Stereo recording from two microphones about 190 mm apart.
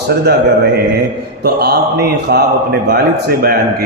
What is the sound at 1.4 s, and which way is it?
A man's voice, 55° right (ahead or behind).